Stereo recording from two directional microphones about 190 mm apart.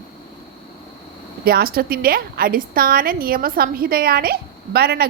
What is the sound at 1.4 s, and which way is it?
A woman's voice, 55° right (ahead or behind).